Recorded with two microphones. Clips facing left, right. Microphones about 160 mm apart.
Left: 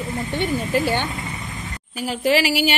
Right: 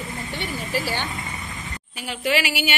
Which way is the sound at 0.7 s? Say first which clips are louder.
Left 4 dB; 55° left (ahead or behind).